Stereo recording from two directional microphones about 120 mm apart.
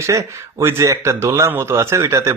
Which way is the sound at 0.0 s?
25° right (ahead or behind).